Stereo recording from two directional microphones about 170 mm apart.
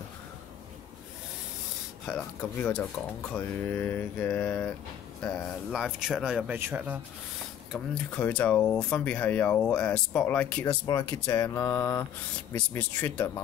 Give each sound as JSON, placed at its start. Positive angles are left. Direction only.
{"t": 2.0, "sound": "speech", "side_deg": 5}
{"t": 5.2, "sound": "speech", "side_deg": -5}
{"t": 7.7, "sound": "speech", "side_deg": 5}
{"t": 10.7, "sound": "speech", "side_deg": 20}